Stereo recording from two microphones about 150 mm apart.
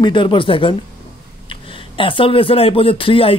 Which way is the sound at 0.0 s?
35° left (ahead or behind).